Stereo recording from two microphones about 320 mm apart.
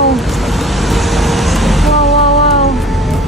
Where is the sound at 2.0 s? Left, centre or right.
Centre.